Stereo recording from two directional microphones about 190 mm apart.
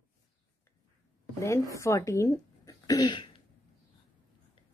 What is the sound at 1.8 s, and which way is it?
Speech, 15° left (ahead or behind).